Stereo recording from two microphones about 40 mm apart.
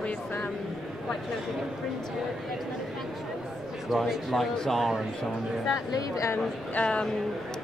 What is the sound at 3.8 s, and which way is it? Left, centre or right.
Speech, centre.